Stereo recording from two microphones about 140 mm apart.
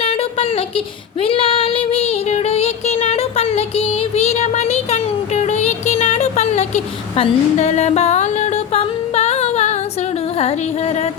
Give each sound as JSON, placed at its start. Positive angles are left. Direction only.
{"t": 0.0, "sound": "a sound", "side_deg": 45}
{"t": 1.2, "sound": "child singing", "side_deg": 40}
{"t": 10.3, "sound": "music", "side_deg": 50}